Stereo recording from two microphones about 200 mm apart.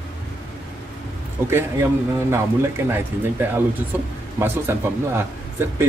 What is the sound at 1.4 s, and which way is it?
Speech, 10° right (ahead or behind).